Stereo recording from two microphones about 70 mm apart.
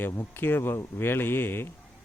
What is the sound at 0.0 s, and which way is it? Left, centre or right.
A man's voice, left.